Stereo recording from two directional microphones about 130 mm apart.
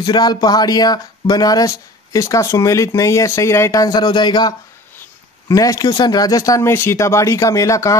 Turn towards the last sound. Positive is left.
turn(degrees=25)  # may be behind; listen again after turning